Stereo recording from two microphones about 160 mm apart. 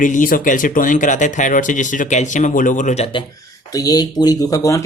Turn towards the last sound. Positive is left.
turn(degrees=20)  # may be behind; listen again after turning